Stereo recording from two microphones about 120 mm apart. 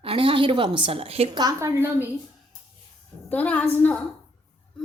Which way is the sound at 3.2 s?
15° left (ahead or behind).